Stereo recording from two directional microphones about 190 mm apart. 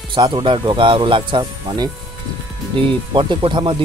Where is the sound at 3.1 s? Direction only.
25° right (ahead or behind).